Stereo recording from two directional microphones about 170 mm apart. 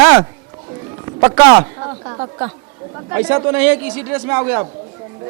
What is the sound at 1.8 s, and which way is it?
A man's voice, 20° right (ahead or behind).